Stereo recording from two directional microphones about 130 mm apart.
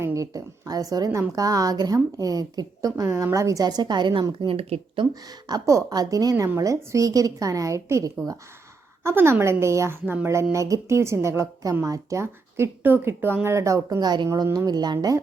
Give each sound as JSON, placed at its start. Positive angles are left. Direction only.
{"t": 0.0, "sound": "speech", "side_deg": -25}
{"t": 5.2, "sound": "speech", "side_deg": -30}